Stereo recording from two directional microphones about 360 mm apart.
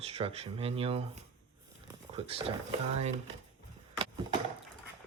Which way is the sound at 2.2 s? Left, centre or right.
Centre.